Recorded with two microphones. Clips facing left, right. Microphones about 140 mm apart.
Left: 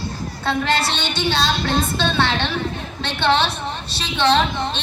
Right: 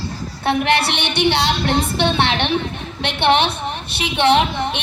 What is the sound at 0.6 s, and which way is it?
Speech, 65° right (ahead or behind).